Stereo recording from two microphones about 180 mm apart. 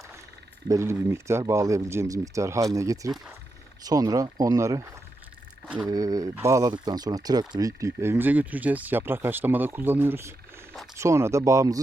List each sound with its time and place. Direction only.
0.7 s speech: 15° right (ahead or behind)